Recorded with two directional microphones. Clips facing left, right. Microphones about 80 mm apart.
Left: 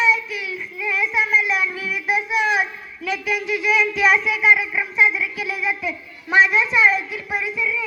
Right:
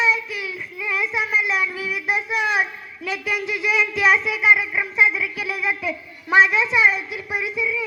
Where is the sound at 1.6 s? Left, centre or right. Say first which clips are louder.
Even; right.